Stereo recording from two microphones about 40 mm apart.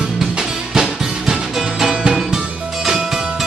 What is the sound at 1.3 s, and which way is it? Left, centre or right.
Music, centre.